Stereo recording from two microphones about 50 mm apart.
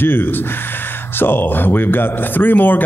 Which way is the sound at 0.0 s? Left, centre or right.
Left.